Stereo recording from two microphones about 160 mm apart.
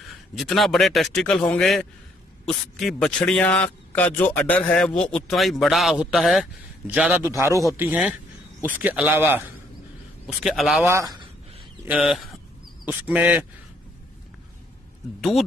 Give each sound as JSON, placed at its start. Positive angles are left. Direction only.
{"t": 0.4, "sound": "a man's voice", "side_deg": 0}
{"t": 7.7, "sound": "a sound", "side_deg": -10}
{"t": 8.7, "sound": "a man's voice", "side_deg": -10}
{"t": 10.2, "sound": "a man's voice", "side_deg": 0}
{"t": 10.9, "sound": "a man's voice", "side_deg": -15}
{"t": 15.1, "sound": "a man's voice", "side_deg": 0}